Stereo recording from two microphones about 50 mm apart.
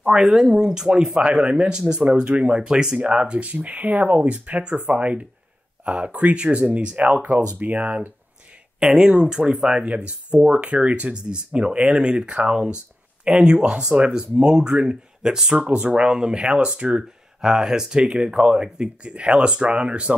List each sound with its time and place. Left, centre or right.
0.2 s speech: centre; by 8.1 s right
8.7 s speech: right
15.5 s speech: right